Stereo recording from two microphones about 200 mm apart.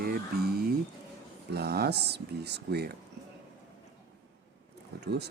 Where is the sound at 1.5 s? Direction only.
55° right (ahead or behind).